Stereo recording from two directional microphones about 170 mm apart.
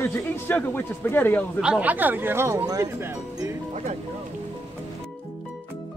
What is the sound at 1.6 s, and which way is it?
Speech, 5° right (ahead or behind).